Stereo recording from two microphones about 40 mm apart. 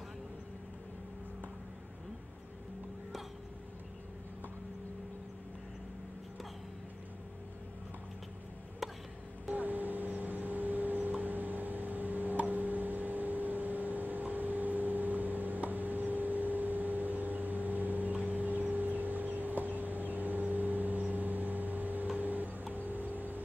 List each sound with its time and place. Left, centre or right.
9.5 s vehicle: right